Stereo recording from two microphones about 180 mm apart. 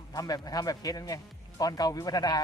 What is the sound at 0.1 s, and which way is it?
A man's voice, 20° left (ahead or behind).